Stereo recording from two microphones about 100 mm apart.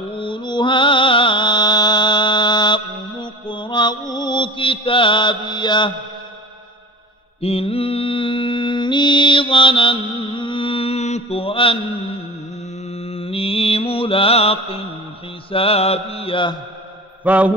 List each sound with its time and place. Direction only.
0.1 s mantra: 60° left (ahead or behind)
7.4 s music: 80° left; by 11.8 s 60° left (ahead or behind)
12.8 s mantra: 85° left; by 16.5 s 60° left (ahead or behind)
17.2 s mantra: 15° right (ahead or behind)